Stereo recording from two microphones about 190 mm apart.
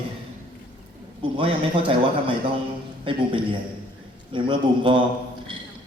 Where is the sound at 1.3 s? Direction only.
25° right (ahead or behind).